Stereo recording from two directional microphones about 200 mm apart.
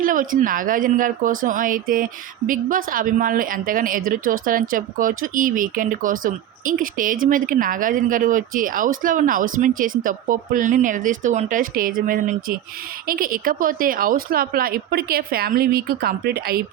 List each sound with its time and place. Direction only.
0.0 s a woman's voice: 40° right (ahead or behind)